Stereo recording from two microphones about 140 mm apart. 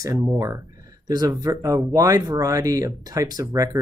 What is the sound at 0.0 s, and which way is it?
Speech, 20° right (ahead or behind).